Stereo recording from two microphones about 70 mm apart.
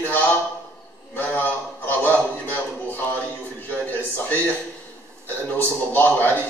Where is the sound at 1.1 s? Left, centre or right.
Left.